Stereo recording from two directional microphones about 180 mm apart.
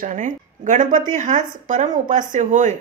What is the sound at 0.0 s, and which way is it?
Speech, 45° right (ahead or behind).